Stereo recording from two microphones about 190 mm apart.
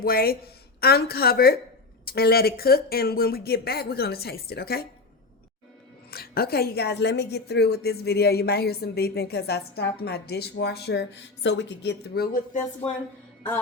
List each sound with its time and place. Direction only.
0.0 s speech: 50° left (ahead or behind)
6.1 s a woman's voice: 55° left (ahead or behind)